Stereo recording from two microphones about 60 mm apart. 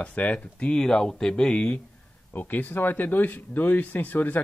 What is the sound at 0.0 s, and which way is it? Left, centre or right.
Speech, left.